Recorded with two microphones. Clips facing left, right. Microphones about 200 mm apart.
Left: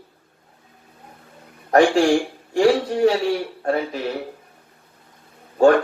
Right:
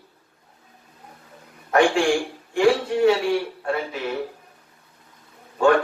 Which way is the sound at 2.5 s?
40° left (ahead or behind).